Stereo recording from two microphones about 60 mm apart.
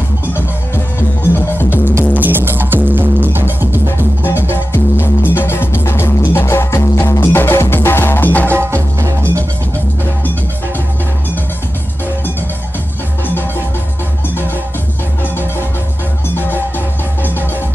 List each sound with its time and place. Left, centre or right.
1.3 s music: left
2.1 s music: right
4.2 s music: left
8.5 s music: right